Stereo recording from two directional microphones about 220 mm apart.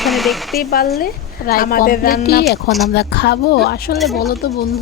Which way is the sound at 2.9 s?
50° left (ahead or behind).